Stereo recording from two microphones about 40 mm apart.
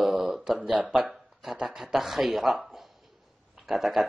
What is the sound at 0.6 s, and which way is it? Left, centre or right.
Speech, right.